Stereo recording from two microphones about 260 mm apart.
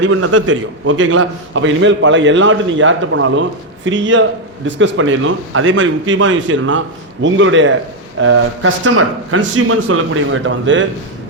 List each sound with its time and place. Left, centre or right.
0.0 s a man's voice: right